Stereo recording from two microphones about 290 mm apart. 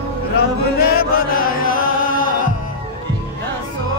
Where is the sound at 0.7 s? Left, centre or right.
Left.